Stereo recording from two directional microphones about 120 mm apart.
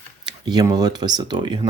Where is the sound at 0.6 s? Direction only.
35° right (ahead or behind).